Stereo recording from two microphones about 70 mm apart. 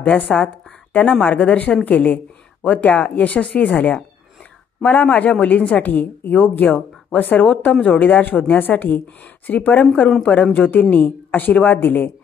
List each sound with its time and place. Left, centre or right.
0.0 s a woman's voice: left